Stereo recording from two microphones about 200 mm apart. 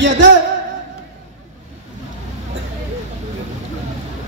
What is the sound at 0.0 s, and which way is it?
Speech, 65° right (ahead or behind).